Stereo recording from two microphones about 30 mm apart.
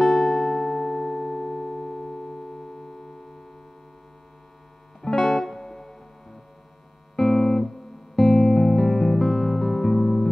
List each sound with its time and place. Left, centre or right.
0.0 s music: centre
5.1 s music: centre
5.6 s music: centre
7.2 s music: centre
8.2 s music: centre